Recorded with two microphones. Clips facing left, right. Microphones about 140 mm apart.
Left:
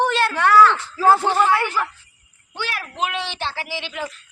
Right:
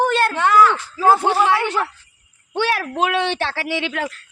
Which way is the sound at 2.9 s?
60° right (ahead or behind).